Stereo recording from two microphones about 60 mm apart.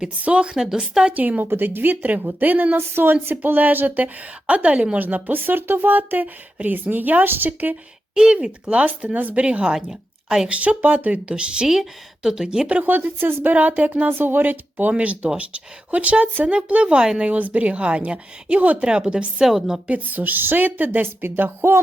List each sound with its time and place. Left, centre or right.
0.2 s speech: right
0.5 s speech: centre
1.1 s a woman's voice: right
8.1 s speech: centre
10.5 s speech: right
12.6 s speech: right
14.1 s a woman's voice: right; by 17.3 s centre
17.3 s speech: right; by 19.8 s centre
19.9 s a woman's voice: right